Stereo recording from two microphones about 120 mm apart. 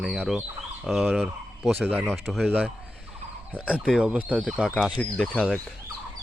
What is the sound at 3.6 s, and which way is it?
Speech, 10° right (ahead or behind).